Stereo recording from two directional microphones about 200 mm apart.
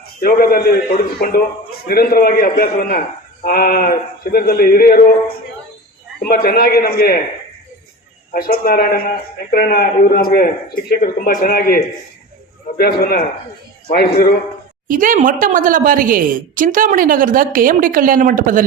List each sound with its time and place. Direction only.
0.2 s a man's voice: 50° left (ahead or behind)
6.1 s a man's voice: 50° left (ahead or behind)
8.3 s a man's voice: 45° left (ahead or behind)
14.8 s a woman's voice: 40° right (ahead or behind)